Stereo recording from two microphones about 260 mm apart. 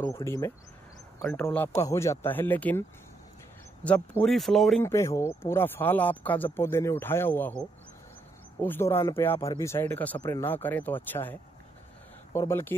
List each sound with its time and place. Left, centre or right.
0.0 s speech: centre
3.8 s speech: centre